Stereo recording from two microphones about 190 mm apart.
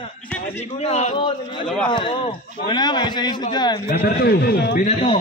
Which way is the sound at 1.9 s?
25° left (ahead or behind).